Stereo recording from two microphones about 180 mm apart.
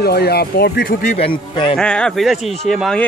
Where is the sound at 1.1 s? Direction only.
30° left (ahead or behind).